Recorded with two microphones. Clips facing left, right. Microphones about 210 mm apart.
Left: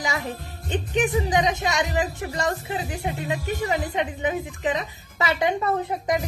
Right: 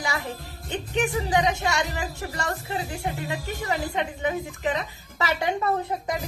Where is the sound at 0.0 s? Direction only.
20° left (ahead or behind).